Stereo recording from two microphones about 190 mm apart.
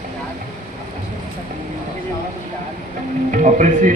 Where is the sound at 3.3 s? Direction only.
40° right (ahead or behind).